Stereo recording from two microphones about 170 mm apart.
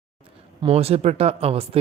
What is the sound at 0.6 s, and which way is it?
Speech, 35° right (ahead or behind).